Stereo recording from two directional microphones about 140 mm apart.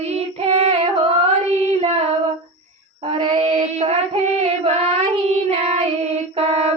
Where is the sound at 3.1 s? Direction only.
35° right (ahead or behind).